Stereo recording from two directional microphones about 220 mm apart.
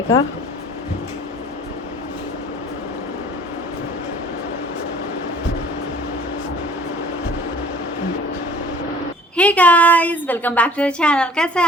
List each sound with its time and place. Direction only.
9.3 s a woman's voice: 5° left (ahead or behind)